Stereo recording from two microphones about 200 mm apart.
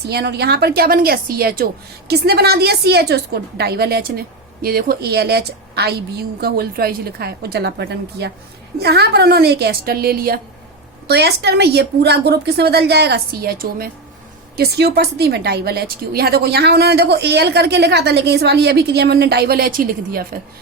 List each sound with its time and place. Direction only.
0.0 s a woman's voice: 55° right (ahead or behind)